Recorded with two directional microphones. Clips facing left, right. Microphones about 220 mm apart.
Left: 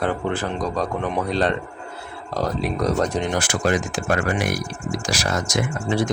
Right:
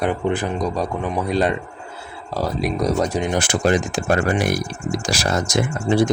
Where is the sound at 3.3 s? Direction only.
20° right (ahead or behind).